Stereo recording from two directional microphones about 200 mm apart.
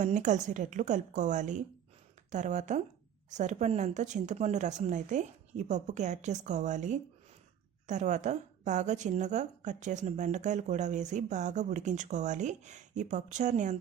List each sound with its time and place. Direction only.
0.0 s a woman's voice: 35° right (ahead or behind)